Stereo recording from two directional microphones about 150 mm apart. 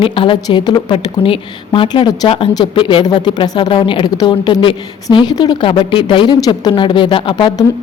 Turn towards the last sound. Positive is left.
turn(degrees=30)  # may be behind; listen again after turning